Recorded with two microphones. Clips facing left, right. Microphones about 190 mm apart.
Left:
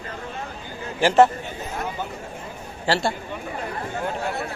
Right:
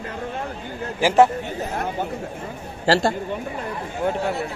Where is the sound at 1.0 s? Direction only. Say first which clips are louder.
Even; 10° right (ahead or behind).